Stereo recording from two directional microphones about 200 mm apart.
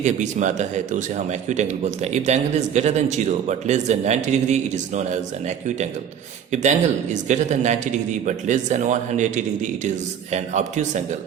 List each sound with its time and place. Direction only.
0.0 s a man's voice: 35° right (ahead or behind)